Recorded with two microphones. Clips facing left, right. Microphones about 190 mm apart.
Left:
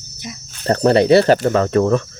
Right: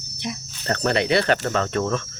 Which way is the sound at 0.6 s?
35° left (ahead or behind).